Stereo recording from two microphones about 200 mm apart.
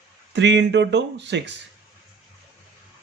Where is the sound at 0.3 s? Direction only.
65° right (ahead or behind).